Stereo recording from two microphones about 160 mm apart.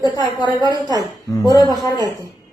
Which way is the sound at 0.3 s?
25° left (ahead or behind).